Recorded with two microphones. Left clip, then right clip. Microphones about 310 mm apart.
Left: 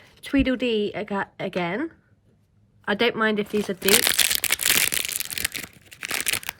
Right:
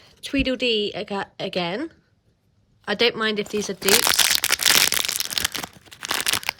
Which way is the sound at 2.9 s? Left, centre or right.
Centre.